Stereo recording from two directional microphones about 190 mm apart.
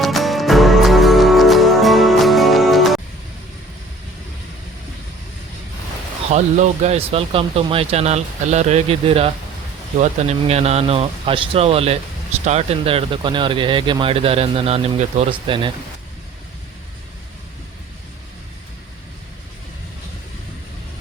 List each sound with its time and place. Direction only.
0.0 s music: centre (ahead or behind)
6.3 s speech: 35° right (ahead or behind)